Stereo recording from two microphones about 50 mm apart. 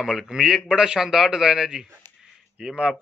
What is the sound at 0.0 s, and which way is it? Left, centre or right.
Speech, centre.